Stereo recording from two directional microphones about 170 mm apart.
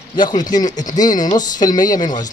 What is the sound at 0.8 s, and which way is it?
Speech, 20° left (ahead or behind).